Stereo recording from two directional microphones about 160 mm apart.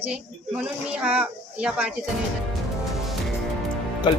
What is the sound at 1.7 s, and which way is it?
Speech, 10° right (ahead or behind).